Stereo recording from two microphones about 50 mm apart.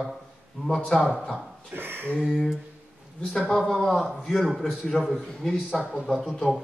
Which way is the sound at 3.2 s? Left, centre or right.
Centre.